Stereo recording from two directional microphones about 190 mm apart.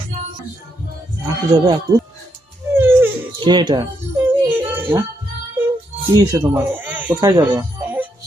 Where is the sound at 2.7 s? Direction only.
10° right (ahead or behind).